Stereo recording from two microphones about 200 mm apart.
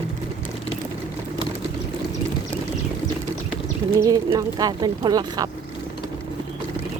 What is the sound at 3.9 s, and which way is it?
Speech, 20° right (ahead or behind).